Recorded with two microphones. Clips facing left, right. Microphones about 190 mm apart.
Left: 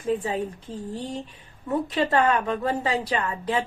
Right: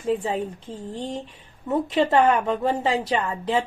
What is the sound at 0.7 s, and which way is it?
A woman's voice, 25° right (ahead or behind).